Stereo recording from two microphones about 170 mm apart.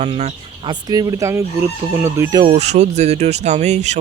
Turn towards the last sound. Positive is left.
turn(degrees=-40)  # may be behind; listen again after turning